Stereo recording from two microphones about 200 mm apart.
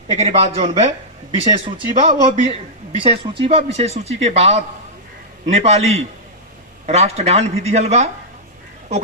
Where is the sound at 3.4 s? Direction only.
30° right (ahead or behind).